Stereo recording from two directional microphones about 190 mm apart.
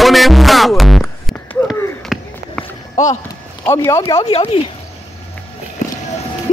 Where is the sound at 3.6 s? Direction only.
15° left (ahead or behind).